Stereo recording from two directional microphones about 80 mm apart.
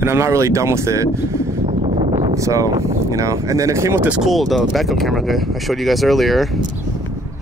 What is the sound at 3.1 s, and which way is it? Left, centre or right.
Speech, right.